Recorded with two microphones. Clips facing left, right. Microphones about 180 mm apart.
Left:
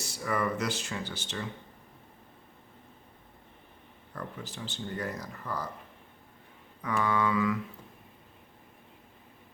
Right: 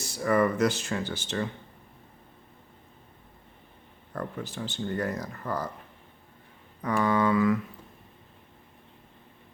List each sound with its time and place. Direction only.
0.2 s speech: 50° right (ahead or behind)
4.1 s speech: 50° right (ahead or behind)
6.8 s speech: 45° right (ahead or behind)